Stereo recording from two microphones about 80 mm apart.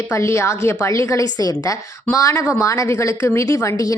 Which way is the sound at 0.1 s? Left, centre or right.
Left.